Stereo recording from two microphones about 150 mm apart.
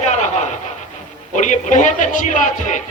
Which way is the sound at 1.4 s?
55° left (ahead or behind).